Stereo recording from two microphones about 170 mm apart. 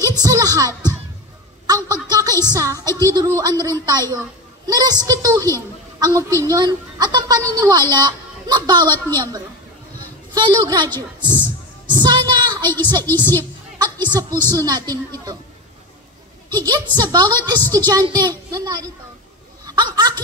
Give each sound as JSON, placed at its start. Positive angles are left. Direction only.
{"t": 0.0, "sound": "music", "side_deg": -25}
{"t": 1.7, "sound": "a woman's voice", "side_deg": -20}
{"t": 11.9, "sound": "a sound", "side_deg": -25}
{"t": 13.0, "sound": "speech", "side_deg": 10}
{"t": 13.7, "sound": "a woman's voice", "side_deg": -25}
{"t": 16.4, "sound": "a woman's voice", "side_deg": -25}
{"t": 19.6, "sound": "a sound", "side_deg": -25}